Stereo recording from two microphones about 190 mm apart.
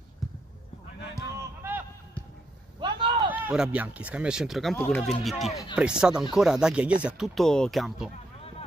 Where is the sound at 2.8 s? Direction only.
25° right (ahead or behind).